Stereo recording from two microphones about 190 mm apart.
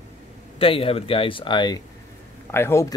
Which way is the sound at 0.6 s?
30° left (ahead or behind).